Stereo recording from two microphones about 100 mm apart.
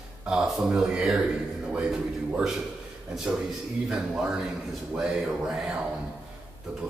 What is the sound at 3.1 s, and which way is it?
A man's voice, 5° right (ahead or behind).